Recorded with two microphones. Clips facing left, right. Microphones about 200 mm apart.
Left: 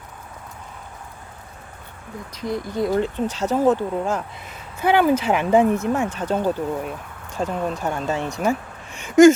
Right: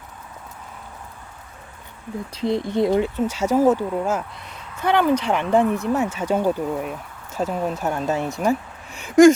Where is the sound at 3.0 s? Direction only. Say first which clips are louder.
Right 1 dB; 10° right (ahead or behind).